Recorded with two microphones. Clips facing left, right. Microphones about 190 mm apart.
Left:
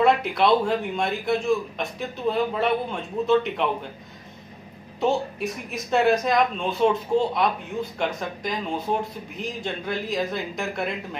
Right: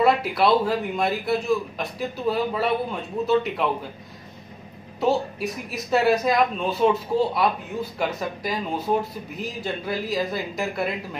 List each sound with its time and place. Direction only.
0.0 s speech: 5° right (ahead or behind)
5.0 s speech: 5° right (ahead or behind)